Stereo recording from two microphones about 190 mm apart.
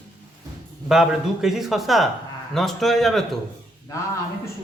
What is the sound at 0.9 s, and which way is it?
Speech, centre (ahead or behind).